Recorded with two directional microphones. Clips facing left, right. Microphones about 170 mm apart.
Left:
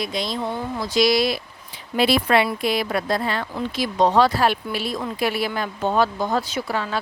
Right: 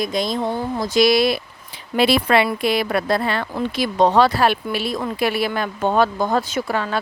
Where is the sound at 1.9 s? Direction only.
75° right (ahead or behind).